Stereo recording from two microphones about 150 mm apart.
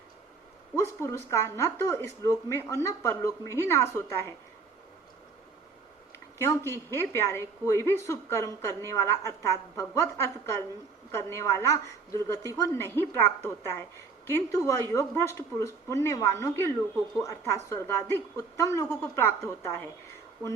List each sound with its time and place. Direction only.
0.8 s a woman's voice: 20° left (ahead or behind)
6.4 s a woman's voice: 20° left (ahead or behind)